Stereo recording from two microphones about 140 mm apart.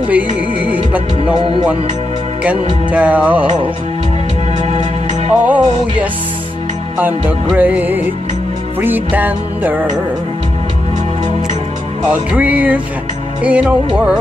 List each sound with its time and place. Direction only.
2.4 s music: 10° right (ahead or behind)
4.6 s music: 50° right (ahead or behind)
5.4 s music: 10° right (ahead or behind)
12.1 s music: 10° right (ahead or behind)